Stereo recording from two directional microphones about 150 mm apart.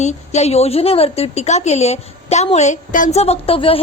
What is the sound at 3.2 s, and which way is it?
Speech, 40° left (ahead or behind).